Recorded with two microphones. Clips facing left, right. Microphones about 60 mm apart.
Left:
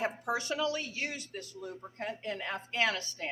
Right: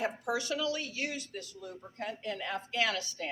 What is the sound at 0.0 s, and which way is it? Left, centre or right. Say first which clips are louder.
Speech: even; left.